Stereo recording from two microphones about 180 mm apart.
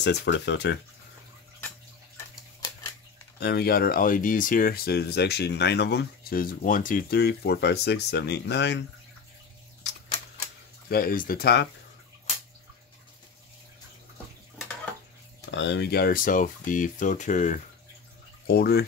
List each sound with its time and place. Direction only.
0.0 s speech: 75° left (ahead or behind)
3.3 s speech: 65° left (ahead or behind)
10.9 s speech: 55° left (ahead or behind)
15.5 s speech: 85° left; by 17.6 s 45° left (ahead or behind)
18.5 s speech: 60° left (ahead or behind)